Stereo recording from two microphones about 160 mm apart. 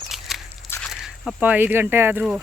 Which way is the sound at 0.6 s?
15° left (ahead or behind).